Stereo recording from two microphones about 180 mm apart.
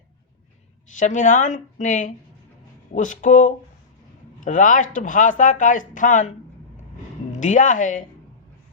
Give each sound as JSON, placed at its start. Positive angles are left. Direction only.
{"t": 0.9, "sound": "speech", "side_deg": 45}
{"t": 7.3, "sound": "speech", "side_deg": 45}